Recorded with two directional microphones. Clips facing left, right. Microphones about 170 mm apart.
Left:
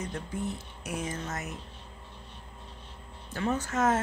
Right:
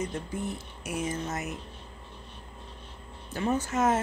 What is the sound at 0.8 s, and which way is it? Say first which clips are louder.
Speech: right 3 dB; 5° right (ahead or behind).